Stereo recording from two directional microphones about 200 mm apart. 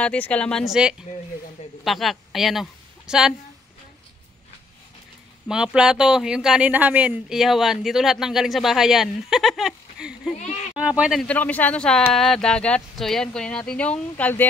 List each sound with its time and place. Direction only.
0.0 s a woman's voice: 5° left (ahead or behind)
5.5 s speech: 5° right (ahead or behind)
10.4 s a sound: 40° left (ahead or behind)
10.8 s speech: 5° right (ahead or behind)